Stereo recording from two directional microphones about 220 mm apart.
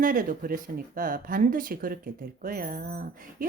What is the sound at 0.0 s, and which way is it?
Speech, 40° right (ahead or behind).